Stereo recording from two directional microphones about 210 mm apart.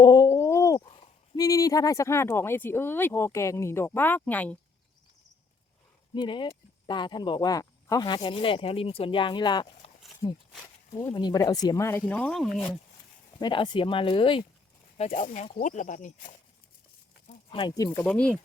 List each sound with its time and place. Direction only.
0.0 s a sound: 20° left (ahead or behind)
1.4 s speech: 15° left (ahead or behind)
6.1 s speech: 25° left (ahead or behind); by 12.5 s 5° left (ahead or behind)
13.4 s speech: 20° left (ahead or behind)
17.5 s speech: 25° left (ahead or behind)
18.0 s speech: 5° left (ahead or behind)